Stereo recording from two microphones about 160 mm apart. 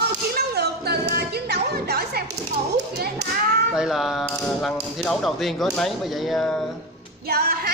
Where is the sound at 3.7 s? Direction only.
5° right (ahead or behind).